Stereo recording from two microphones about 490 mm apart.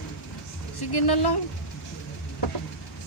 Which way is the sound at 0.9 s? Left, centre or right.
Left.